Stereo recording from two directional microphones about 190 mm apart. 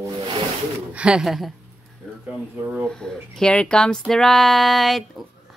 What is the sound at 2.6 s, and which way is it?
Speech, 5° right (ahead or behind).